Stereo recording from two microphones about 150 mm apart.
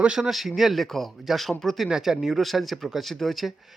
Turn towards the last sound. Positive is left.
turn(degrees=0)  # may be behind; listen again after turning